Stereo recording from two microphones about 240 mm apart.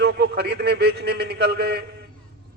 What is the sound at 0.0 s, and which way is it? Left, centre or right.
A man's voice, right.